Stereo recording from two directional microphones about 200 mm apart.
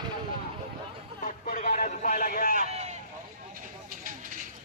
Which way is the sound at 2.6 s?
35° right (ahead or behind).